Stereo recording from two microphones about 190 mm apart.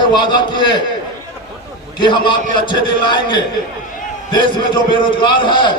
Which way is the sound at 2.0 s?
25° left (ahead or behind).